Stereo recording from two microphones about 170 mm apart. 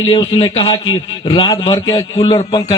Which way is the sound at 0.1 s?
30° left (ahead or behind).